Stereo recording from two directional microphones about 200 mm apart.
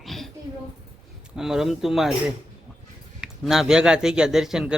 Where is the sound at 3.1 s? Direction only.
Centre (ahead or behind).